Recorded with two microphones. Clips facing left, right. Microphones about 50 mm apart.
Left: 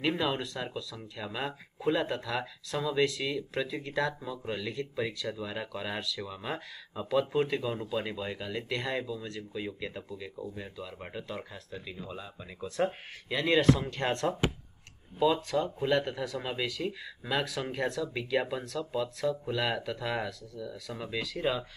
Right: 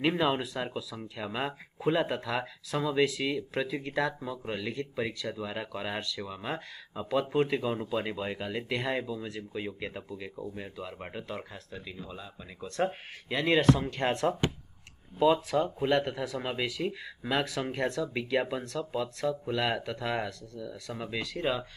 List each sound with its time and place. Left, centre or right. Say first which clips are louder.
0.0 s speech: right 3 dB; centre
10.1 s speech: right 1 dB; right; by 14.3 s centre
15.5 s speech: right 1 dB; centre